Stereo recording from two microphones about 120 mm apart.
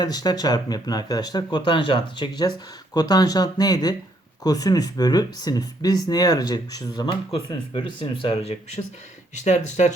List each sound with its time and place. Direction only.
0.0 s speech: 35° left (ahead or behind)
7.3 s speech: 50° left (ahead or behind)
9.3 s speech: 75° left (ahead or behind)